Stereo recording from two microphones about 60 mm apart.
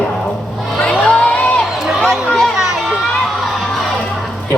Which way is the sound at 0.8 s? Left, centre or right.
Left.